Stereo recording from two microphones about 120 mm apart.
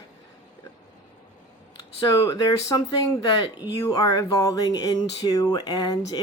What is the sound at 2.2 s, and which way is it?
Speech, 30° left (ahead or behind).